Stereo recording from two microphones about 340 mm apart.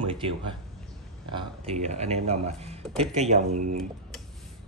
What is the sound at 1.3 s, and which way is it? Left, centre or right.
Speech, centre.